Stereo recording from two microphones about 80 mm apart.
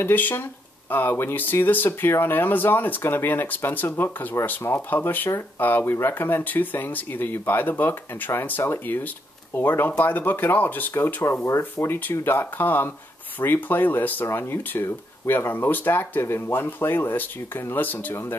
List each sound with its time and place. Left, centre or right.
0.0 s speech: left